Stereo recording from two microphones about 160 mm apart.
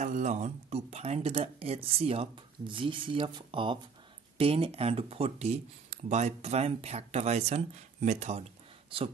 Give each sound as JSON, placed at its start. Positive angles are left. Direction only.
{"t": 0.0, "sound": "speech", "side_deg": -45}